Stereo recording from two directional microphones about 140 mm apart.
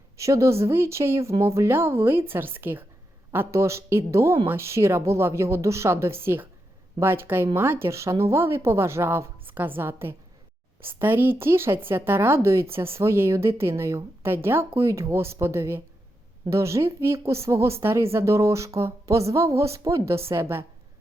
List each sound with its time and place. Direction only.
0.2 s a woman's voice: 20° right (ahead or behind)